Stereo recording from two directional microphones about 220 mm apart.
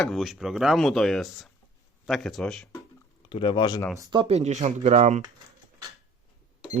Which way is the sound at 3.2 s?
25° left (ahead or behind).